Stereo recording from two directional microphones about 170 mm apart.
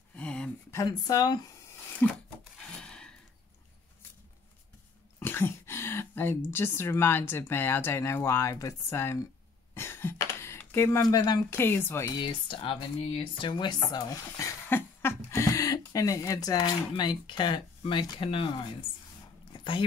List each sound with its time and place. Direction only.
0.1 s a sound: 5° left (ahead or behind)
0.7 s speech: 20° left (ahead or behind)
2.0 s speech: 10° left (ahead or behind)
2.8 s gasp: 5° left (ahead or behind)
5.2 s throat clearing: 15° left (ahead or behind)
6.5 s speech: 15° left (ahead or behind)
12.2 s speech: 30° left (ahead or behind)
14.7 s a sound: 15° left (ahead or behind)
15.9 s speech: 20° left (ahead or behind)